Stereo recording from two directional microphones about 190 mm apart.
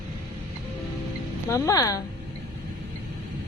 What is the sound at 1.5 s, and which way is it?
Speech, 15° left (ahead or behind).